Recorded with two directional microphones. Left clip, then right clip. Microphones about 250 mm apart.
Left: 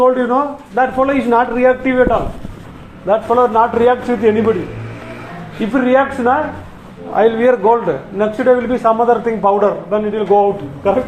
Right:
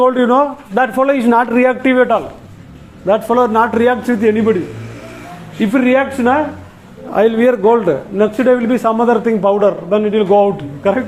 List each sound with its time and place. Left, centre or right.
0.0 s a man's voice: right
5.7 s a man's voice: right